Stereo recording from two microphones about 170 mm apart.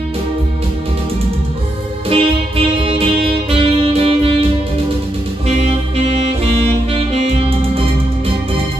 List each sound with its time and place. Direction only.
2.0 s music: 35° right (ahead or behind)
7.2 s music: 35° right (ahead or behind)